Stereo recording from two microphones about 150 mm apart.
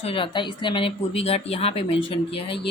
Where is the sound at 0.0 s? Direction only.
35° left (ahead or behind).